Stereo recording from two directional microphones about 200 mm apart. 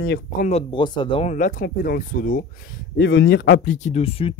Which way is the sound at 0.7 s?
25° left (ahead or behind).